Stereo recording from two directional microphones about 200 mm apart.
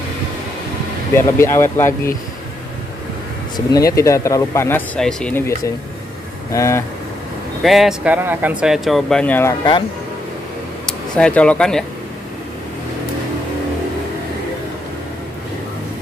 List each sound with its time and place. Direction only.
1.1 s speech: 15° left (ahead or behind)
3.5 s speech: 15° left (ahead or behind)
7.6 s speech: centre (ahead or behind)
10.9 s speech: 5° left (ahead or behind)